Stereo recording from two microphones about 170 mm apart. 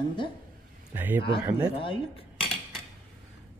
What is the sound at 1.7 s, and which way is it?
Speech, 35° left (ahead or behind).